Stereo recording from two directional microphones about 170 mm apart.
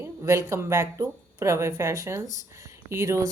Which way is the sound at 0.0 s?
15° right (ahead or behind).